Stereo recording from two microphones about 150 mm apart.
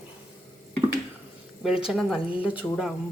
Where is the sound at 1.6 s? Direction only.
5° right (ahead or behind).